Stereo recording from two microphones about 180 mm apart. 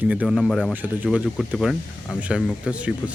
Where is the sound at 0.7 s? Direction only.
10° right (ahead or behind).